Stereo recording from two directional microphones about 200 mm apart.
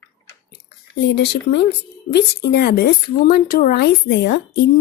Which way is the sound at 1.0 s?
60° left (ahead or behind).